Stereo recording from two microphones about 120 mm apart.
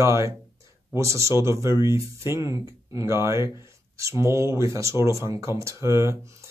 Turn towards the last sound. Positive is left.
turn(degrees=-25)  # may be behind; listen again after turning